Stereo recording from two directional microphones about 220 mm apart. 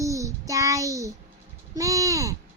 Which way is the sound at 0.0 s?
15° right (ahead or behind).